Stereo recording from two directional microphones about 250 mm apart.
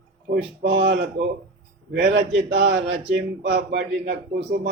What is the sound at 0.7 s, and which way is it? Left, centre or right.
Speech, right.